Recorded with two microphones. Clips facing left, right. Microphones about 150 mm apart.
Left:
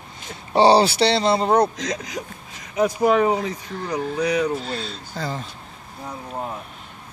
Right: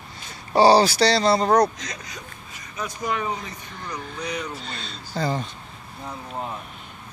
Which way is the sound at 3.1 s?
85° left.